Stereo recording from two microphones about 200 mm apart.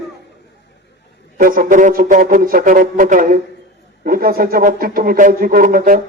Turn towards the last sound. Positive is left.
turn(degrees=-45)  # may be behind; listen again after turning